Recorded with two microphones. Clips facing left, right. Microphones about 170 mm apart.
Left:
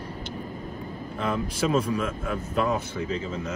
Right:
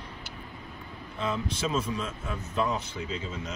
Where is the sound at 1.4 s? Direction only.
25° right (ahead or behind).